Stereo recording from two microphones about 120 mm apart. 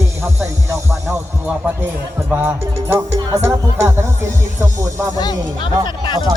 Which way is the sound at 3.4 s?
20° right (ahead or behind).